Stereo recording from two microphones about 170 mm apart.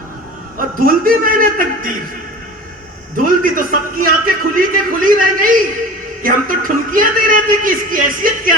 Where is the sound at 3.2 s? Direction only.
55° right (ahead or behind).